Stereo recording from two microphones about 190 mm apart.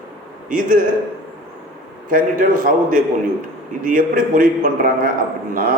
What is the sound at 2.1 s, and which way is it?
A man's voice, 45° right (ahead or behind).